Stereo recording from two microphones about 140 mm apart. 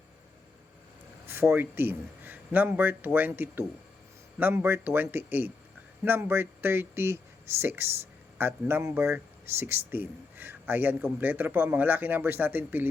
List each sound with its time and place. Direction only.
1.3 s speech: 15° right (ahead or behind)